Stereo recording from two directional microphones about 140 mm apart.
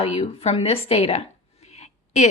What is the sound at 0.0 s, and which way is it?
A woman's voice, 45° left (ahead or behind).